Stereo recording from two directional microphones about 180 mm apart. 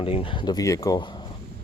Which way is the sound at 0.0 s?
30° left (ahead or behind).